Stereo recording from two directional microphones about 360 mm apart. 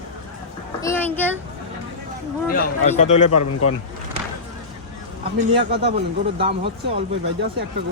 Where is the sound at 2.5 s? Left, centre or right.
Left.